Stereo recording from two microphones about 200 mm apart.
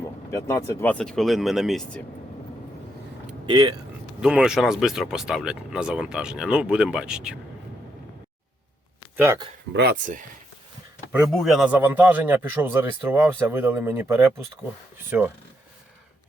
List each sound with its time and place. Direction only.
0.3 s speech: 15° left (ahead or behind)
3.5 s speech: 20° right (ahead or behind)
4.2 s speech: 5° right (ahead or behind)
9.1 s speech: 10° right (ahead or behind)
9.7 s speech: 45° right (ahead or behind)
11.1 s a man's voice: centre (ahead or behind)